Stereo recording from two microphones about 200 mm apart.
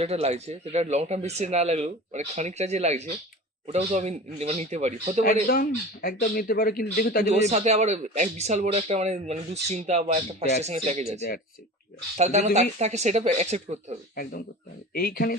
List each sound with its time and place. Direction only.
0.0 s a man's voice: 30° right (ahead or behind)
5.5 s speech: 50° left (ahead or behind)
7.3 s a man's voice: 35° right (ahead or behind)
14.2 s speech: 50° left (ahead or behind)